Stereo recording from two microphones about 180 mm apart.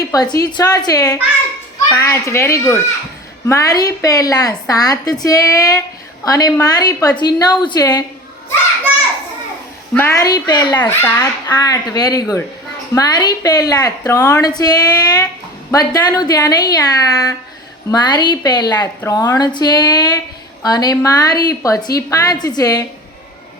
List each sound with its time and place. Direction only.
0.1 s a child's voice: 20° left (ahead or behind)
9.9 s a child's voice: 15° left (ahead or behind)